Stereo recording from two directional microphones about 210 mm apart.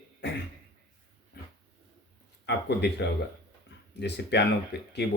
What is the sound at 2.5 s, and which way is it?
Speech, 55° left (ahead or behind).